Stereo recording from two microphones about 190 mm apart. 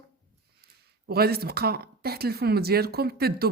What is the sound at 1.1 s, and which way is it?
Speech, 55° right (ahead or behind).